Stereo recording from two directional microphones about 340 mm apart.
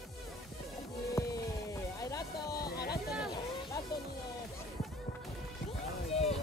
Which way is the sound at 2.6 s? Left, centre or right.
Left.